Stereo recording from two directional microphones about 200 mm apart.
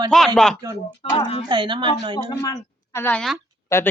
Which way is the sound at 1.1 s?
30° left (ahead or behind).